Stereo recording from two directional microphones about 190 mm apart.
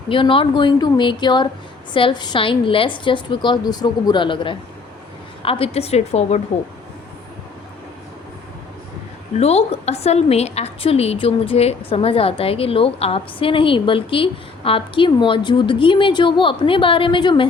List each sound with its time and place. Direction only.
0.1 s a woman's voice: 25° left (ahead or behind)
9.4 s a woman's voice: 35° left (ahead or behind)